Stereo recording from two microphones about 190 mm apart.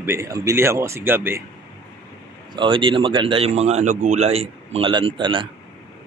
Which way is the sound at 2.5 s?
25° right (ahead or behind).